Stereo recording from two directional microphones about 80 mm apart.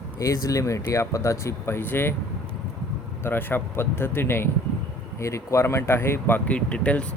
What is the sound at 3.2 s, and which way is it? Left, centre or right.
Speech, left.